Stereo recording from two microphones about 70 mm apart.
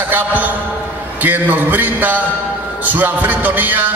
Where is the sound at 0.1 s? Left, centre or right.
Right.